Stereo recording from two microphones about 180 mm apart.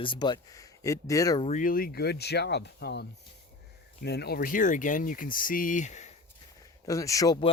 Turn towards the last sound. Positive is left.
turn(degrees=20)  # may be behind; listen again after turning